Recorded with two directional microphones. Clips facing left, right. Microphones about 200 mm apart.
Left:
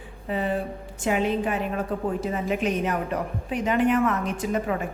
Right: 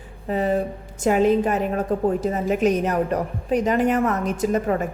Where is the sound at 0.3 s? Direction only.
40° right (ahead or behind).